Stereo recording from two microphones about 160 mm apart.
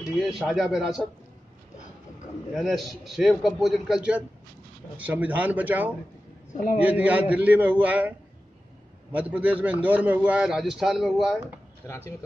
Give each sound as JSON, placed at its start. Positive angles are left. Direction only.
{"t": 0.0, "sound": "a man's voice", "side_deg": 0}
{"t": 2.5, "sound": "a man's voice", "side_deg": 0}
{"t": 6.5, "sound": "a man's voice", "side_deg": 60}
{"t": 6.8, "sound": "a man's voice", "side_deg": -10}
{"t": 9.1, "sound": "a man's voice", "side_deg": -10}